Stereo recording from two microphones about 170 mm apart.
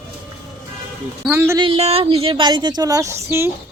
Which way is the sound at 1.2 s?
15° right (ahead or behind).